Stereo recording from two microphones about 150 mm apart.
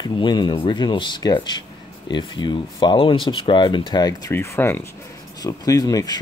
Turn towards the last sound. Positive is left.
turn(degrees=25)  # may be behind; listen again after turning